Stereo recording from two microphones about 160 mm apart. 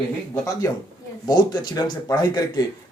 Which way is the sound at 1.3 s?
25° left (ahead or behind).